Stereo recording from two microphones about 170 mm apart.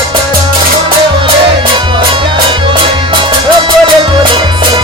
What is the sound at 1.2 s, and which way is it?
Music, 30° right (ahead or behind).